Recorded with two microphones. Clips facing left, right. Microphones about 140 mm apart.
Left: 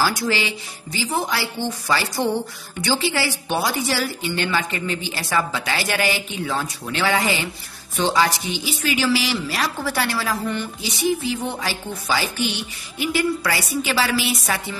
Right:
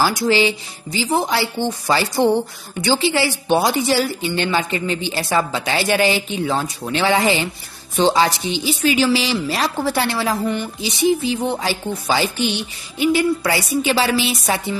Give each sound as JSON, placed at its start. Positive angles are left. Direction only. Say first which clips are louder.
{"t": 0.0, "sound": "a woman's voice", "louder": "right 5 dB", "side_deg": -25}